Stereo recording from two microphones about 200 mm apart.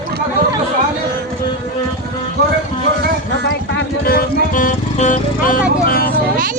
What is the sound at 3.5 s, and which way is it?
Music, 50° left (ahead or behind).